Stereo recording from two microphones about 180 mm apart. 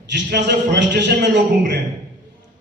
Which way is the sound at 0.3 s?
70° right (ahead or behind).